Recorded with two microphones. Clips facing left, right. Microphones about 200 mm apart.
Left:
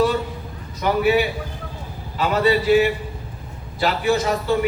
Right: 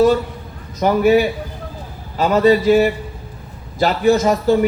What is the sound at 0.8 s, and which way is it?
A man's voice, 45° right (ahead or behind).